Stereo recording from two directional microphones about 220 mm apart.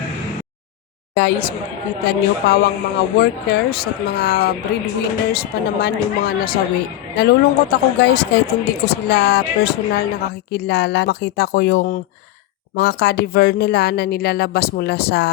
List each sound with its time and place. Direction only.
1.1 s speech: 50° left (ahead or behind)